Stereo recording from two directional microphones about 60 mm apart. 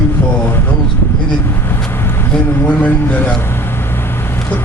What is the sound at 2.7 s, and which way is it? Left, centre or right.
Speech, left.